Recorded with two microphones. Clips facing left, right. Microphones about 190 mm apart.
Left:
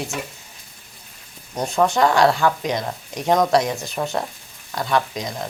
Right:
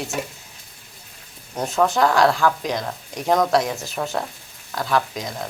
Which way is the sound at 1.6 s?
Centre (ahead or behind).